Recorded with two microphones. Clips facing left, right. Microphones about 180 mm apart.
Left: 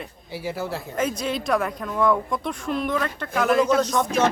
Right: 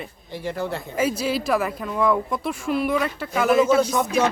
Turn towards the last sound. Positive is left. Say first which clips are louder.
# even
turn(degrees=-10)  # may be behind; listen again after turning